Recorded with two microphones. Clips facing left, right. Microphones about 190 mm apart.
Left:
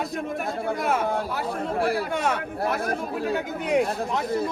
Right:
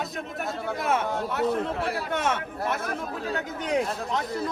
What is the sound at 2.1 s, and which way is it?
Speech, centre (ahead or behind).